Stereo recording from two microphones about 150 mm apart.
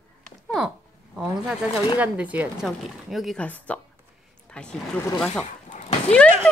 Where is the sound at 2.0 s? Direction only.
10° right (ahead or behind).